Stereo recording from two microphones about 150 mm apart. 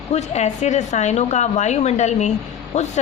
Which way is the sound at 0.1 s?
50° left (ahead or behind).